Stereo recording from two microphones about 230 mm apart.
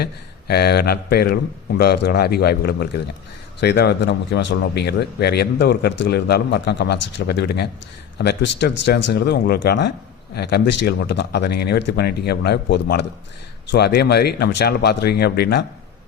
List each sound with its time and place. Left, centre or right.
0.0 s speech: left